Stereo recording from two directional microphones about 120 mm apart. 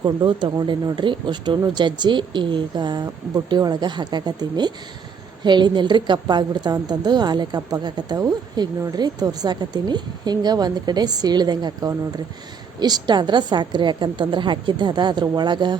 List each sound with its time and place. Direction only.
0.0 s a woman's voice: 40° right (ahead or behind)